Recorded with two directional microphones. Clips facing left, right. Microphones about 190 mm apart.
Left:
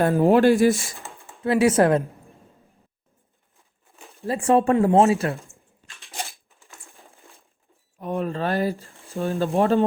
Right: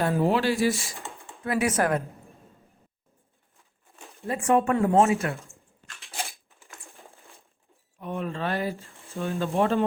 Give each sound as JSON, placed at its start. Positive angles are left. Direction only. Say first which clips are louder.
{"t": 0.0, "sound": "speech", "louder": "left 7 dB", "side_deg": 55}
{"t": 1.5, "sound": "speech", "louder": "left 7 dB", "side_deg": 25}
{"t": 4.3, "sound": "speech", "louder": "left 4 dB", "side_deg": 30}
{"t": 7.9, "sound": "speech", "louder": "left 5 dB", "side_deg": 40}